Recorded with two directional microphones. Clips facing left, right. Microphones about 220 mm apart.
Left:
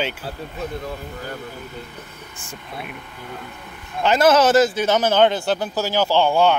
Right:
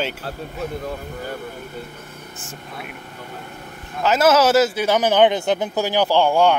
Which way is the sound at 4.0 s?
5° right (ahead or behind).